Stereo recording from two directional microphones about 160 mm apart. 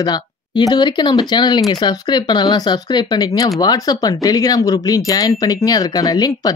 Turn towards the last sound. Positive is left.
turn(degrees=25)  # may be behind; listen again after turning